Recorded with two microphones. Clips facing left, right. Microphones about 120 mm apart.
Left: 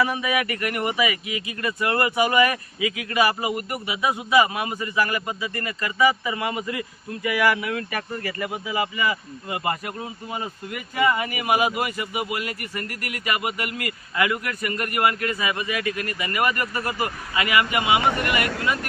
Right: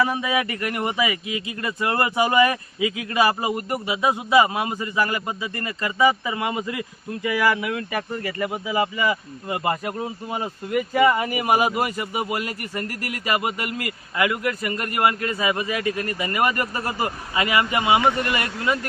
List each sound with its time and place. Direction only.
0.1 s speech: 25° right (ahead or behind)